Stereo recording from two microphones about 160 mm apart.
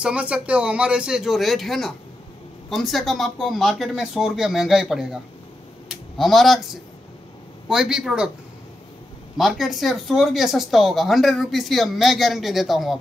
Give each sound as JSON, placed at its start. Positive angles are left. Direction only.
{"t": 0.0, "sound": "speech", "side_deg": -5}
{"t": 9.4, "sound": "speech", "side_deg": 0}